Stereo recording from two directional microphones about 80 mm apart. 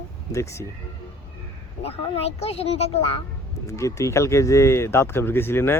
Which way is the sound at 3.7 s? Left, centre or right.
Left.